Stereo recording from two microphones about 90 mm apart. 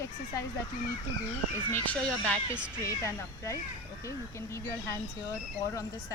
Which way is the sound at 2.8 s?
35° left (ahead or behind).